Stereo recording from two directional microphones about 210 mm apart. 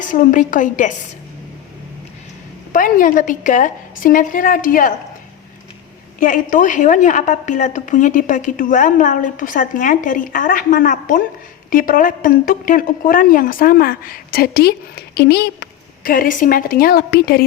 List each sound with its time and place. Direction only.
0.1 s a woman's voice: 40° left (ahead or behind)
2.7 s a woman's voice: 40° left (ahead or behind)
6.1 s a woman's voice: 40° left (ahead or behind)